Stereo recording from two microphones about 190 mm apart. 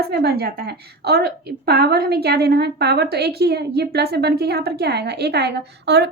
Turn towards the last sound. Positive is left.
turn(degrees=-60)  # may be behind; listen again after turning